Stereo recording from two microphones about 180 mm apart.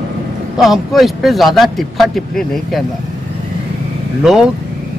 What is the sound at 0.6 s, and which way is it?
Speech, centre (ahead or behind).